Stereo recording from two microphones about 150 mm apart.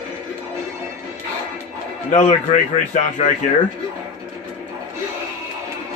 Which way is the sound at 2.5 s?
50° left (ahead or behind).